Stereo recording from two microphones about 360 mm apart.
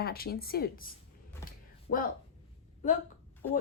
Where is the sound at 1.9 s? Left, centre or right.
Left.